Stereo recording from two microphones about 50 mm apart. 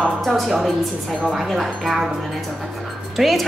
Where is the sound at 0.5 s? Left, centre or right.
Centre.